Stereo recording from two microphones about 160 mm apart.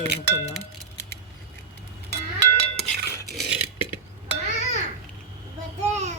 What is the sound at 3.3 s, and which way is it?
Burping, 90° right.